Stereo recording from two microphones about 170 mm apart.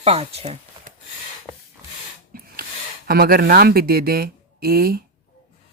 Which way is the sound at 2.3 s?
60° right (ahead or behind).